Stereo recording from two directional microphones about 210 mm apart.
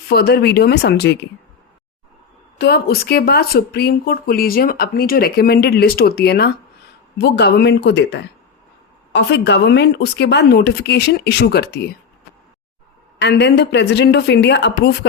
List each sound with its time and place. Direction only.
0.1 s speech: 50° left (ahead or behind)
2.6 s speech: 50° left (ahead or behind)
13.1 s speech: 55° left (ahead or behind)